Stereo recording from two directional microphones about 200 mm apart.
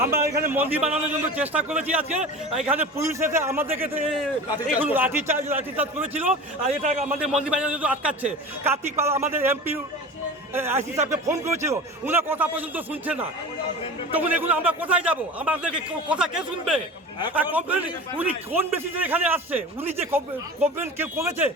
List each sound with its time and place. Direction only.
0.4 s a man's voice: 10° right (ahead or behind)
6.7 s a man's voice: 35° right (ahead or behind)
7.4 s a man's voice: 5° right (ahead or behind)